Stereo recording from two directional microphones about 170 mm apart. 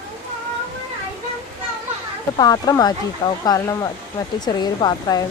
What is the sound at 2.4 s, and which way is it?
Speech, 20° left (ahead or behind).